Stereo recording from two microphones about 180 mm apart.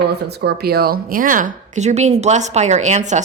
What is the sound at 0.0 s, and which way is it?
Speech, 65° right (ahead or behind).